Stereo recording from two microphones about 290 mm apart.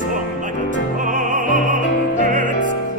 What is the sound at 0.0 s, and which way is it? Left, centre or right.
Music, right.